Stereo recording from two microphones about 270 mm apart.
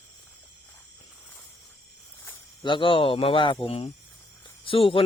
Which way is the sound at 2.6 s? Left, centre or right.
Centre.